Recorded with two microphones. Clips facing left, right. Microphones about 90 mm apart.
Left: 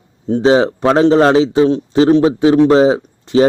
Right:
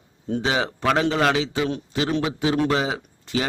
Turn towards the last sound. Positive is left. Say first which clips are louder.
# left 14 dB
turn(degrees=30)  # may be behind; listen again after turning